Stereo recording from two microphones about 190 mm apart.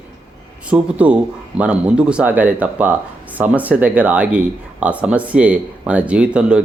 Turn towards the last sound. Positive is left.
turn(degrees=-5)  # may be behind; listen again after turning